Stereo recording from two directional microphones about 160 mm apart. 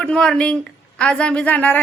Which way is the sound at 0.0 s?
5° left (ahead or behind).